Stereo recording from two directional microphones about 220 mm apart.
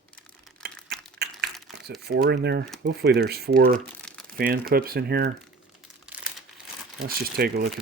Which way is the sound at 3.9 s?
5° left (ahead or behind).